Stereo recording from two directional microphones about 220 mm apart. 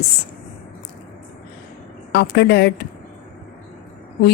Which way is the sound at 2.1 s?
50° left (ahead or behind).